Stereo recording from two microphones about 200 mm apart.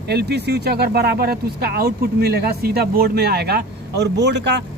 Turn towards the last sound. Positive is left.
turn(degrees=-60)  # may be behind; listen again after turning